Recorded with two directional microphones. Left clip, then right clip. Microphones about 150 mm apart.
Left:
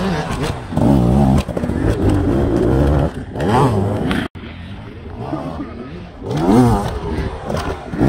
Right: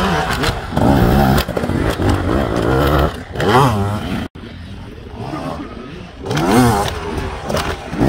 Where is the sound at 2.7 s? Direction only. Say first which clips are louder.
Right 3 dB; 50° right (ahead or behind).